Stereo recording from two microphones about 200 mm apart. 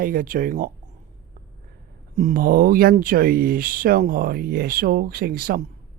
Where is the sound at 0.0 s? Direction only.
45° right (ahead or behind).